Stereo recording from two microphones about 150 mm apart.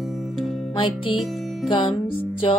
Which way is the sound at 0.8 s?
35° left (ahead or behind).